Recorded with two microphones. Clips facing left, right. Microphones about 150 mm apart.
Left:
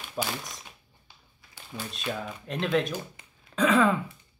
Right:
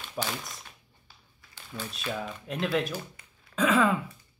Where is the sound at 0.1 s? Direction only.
Centre (ahead or behind).